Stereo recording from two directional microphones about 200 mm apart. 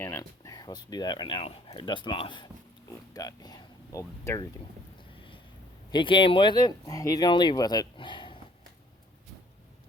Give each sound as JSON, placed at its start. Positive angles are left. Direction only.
{"t": 0.0, "sound": "speech", "side_deg": 15}
{"t": 5.9, "sound": "speech", "side_deg": 25}